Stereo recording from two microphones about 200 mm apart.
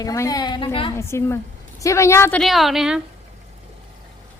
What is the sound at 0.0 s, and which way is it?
Speech, 15° left (ahead or behind).